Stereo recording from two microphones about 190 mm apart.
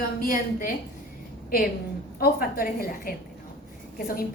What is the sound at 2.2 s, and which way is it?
A woman's voice, 50° left (ahead or behind).